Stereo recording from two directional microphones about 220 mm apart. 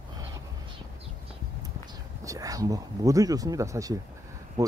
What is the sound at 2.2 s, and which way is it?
Speech, 15° right (ahead or behind).